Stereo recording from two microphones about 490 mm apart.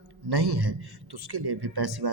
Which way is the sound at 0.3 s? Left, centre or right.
Right.